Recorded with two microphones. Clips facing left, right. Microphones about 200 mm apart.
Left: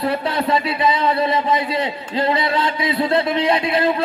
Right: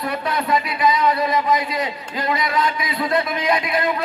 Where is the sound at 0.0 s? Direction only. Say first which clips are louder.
Left 4 dB; 30° left (ahead or behind).